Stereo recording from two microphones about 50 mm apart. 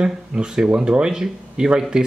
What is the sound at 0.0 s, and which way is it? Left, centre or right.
Speech, centre.